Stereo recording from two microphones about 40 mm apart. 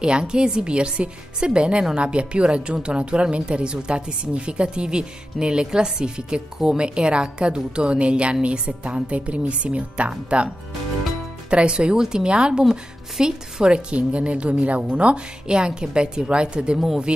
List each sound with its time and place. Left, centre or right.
0.0 s speech: right
11.5 s speech: right
16.7 s speech: centre